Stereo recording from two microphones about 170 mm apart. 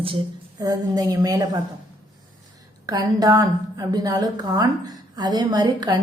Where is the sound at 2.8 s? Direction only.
20° right (ahead or behind).